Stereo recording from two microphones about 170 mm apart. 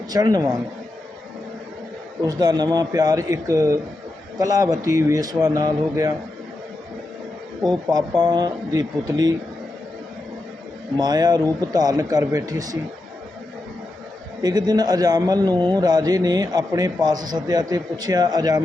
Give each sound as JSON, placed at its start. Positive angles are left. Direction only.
{"t": 0.1, "sound": "a man's voice", "side_deg": -25}
{"t": 2.2, "sound": "a man's voice", "side_deg": -25}
{"t": 7.6, "sound": "a man's voice", "side_deg": -25}
{"t": 10.9, "sound": "a man's voice", "side_deg": -25}
{"t": 14.4, "sound": "a man's voice", "side_deg": -25}